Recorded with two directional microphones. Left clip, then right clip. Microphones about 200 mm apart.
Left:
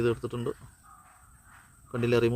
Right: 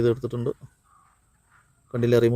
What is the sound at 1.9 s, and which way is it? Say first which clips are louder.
Speech: right 5 dB; 25° right (ahead or behind).